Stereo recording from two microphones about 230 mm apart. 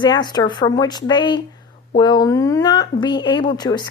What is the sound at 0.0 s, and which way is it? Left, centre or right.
A woman's voice, centre.